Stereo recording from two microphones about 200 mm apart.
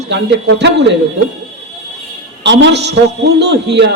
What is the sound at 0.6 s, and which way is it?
Speech, 60° right (ahead or behind).